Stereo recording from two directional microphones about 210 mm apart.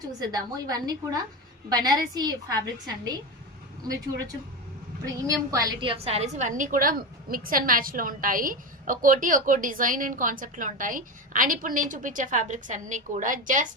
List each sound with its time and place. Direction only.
0.2 s a woman's voice: 20° right (ahead or behind)
5.2 s a woman's voice: 15° right (ahead or behind); by 13.7 s 40° right (ahead or behind)